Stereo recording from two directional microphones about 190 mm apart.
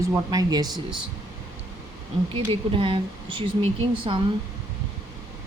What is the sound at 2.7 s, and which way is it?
A woman's voice, 25° right (ahead or behind).